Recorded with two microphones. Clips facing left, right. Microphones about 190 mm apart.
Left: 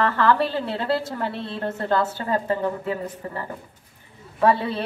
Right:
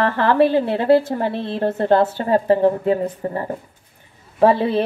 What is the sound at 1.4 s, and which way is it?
A woman's voice, 30° right (ahead or behind).